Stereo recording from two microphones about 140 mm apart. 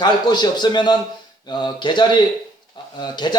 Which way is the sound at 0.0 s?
30° left (ahead or behind).